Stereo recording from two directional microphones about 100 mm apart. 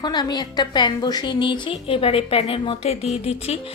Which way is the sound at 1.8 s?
65° left (ahead or behind).